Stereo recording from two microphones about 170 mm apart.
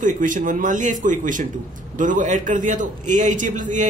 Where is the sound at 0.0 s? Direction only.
50° right (ahead or behind).